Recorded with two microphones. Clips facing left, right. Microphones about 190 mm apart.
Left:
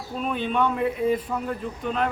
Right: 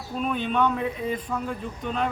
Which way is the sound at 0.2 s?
Centre (ahead or behind).